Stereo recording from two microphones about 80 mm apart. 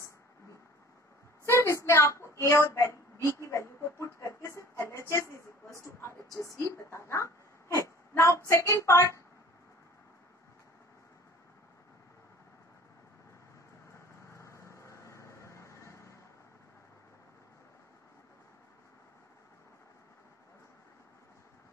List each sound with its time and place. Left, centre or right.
1.4 s a sound: left
2.7 s a woman's voice: left
13.9 s vehicle: left